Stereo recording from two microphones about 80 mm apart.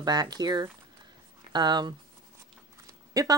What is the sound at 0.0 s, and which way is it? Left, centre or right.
Speech, right.